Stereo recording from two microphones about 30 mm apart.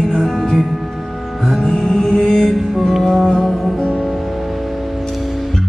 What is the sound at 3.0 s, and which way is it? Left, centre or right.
Music, centre.